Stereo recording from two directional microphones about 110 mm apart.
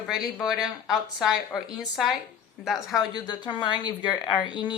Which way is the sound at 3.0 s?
40° left (ahead or behind).